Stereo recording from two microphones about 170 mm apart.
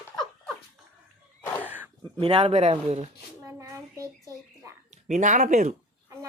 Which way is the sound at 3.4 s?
20° right (ahead or behind).